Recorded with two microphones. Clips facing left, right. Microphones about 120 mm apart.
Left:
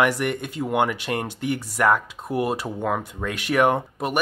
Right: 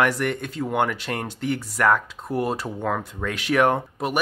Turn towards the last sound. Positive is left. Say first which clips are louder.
# even
turn(degrees=0)  # may be behind; listen again after turning